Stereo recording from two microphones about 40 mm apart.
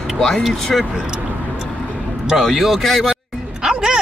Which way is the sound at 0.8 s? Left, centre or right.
Centre.